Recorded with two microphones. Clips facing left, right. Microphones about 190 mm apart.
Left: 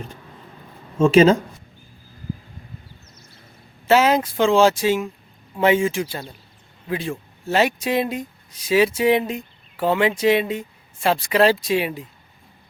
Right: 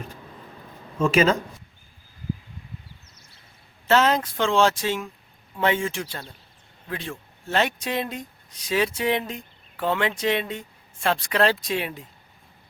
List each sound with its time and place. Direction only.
0.9 s speech: 30° left (ahead or behind)
3.8 s speech: 10° left (ahead or behind)